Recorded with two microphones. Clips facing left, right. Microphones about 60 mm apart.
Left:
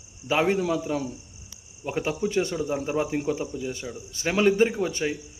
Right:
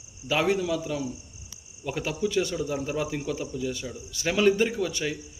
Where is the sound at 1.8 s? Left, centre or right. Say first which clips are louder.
Left 2 dB; left.